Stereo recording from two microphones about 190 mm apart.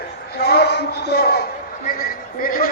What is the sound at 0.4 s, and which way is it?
A man's voice, 60° left (ahead or behind).